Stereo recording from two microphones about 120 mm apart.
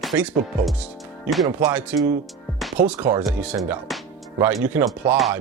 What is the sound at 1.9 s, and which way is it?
Speech, 15° right (ahead or behind).